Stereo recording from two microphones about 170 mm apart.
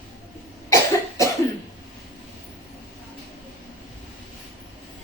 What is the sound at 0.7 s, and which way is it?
Cough, 20° left (ahead or behind).